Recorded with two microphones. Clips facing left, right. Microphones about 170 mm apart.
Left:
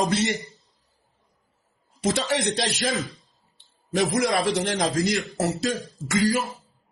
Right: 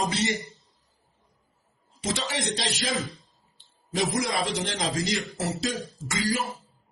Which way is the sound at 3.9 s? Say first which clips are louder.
Left 4 dB; 60° left (ahead or behind).